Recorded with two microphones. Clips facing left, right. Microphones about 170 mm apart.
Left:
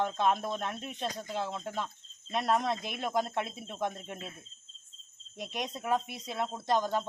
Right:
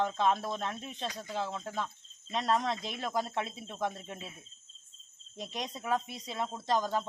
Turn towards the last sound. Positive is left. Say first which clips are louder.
# left 1 dB
turn(degrees=10)  # may be behind; listen again after turning